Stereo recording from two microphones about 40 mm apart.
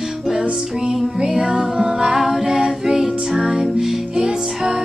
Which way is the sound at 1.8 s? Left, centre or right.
Centre.